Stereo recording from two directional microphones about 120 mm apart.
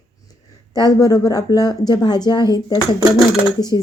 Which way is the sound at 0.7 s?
30° left (ahead or behind).